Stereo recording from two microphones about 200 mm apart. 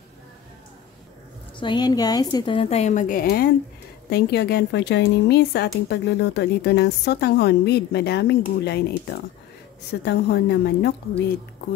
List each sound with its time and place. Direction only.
1.6 s a woman's voice: 20° left (ahead or behind); by 11.2 s 55° left (ahead or behind)